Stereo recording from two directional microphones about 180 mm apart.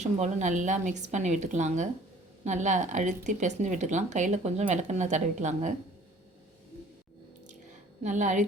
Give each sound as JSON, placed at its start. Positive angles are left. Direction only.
{"t": 0.0, "sound": "speech", "side_deg": -40}
{"t": 8.0, "sound": "a woman's voice", "side_deg": -45}